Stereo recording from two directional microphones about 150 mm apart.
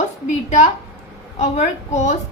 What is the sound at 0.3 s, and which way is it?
A woman's voice, 50° left (ahead or behind).